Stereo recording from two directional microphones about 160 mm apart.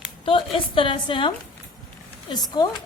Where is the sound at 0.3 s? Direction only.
35° left (ahead or behind).